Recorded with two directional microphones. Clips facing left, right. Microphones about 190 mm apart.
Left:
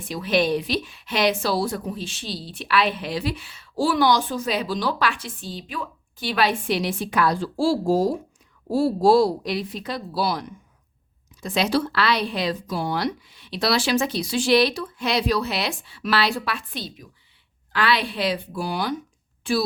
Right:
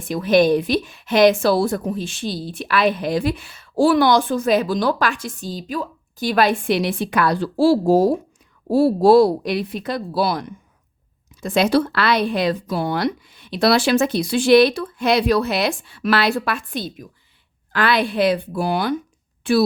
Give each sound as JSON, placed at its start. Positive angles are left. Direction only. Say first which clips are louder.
{"t": 0.1, "sound": "a woman's voice", "louder": "right 6 dB", "side_deg": -50}